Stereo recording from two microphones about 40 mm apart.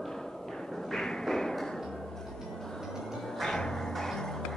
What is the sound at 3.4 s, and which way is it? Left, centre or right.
Music, centre.